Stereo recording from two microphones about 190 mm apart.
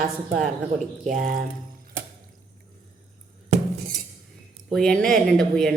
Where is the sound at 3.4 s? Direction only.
35° right (ahead or behind).